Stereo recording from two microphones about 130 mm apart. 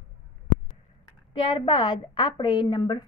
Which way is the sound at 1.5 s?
35° left (ahead or behind).